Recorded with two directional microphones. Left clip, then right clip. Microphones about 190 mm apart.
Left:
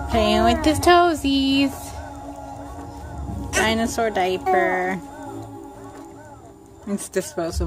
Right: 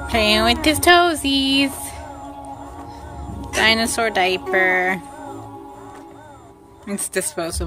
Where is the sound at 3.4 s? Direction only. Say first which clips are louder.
Right 4 dB; 5° left (ahead or behind).